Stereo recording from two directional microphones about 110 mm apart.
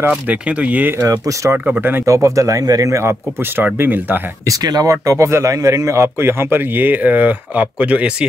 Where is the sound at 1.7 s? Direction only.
20° right (ahead or behind).